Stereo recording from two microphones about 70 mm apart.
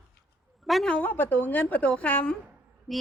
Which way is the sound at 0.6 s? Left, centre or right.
Centre.